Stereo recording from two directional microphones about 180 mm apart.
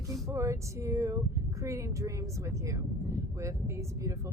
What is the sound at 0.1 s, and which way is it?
Speech, 15° right (ahead or behind).